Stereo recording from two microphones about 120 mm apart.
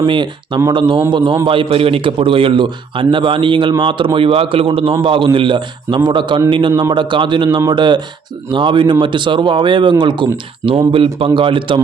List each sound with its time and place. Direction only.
0.0 s a man's voice: 40° right (ahead or behind)